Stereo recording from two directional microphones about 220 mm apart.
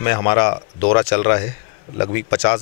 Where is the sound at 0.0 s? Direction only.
15° left (ahead or behind).